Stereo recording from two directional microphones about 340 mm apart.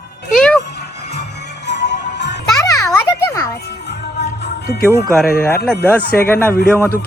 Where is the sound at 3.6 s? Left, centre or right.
Left.